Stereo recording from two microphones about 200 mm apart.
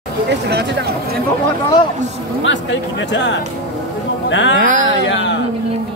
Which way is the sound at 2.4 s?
65° left (ahead or behind).